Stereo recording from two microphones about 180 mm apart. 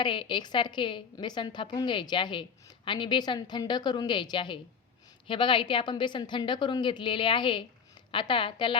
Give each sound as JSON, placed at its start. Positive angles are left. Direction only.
{"t": 0.0, "sound": "a woman's voice", "side_deg": 25}